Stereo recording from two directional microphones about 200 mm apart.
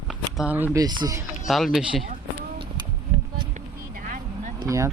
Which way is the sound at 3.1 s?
30° right (ahead or behind).